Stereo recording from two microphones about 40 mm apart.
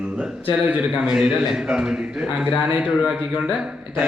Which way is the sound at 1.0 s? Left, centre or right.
Centre.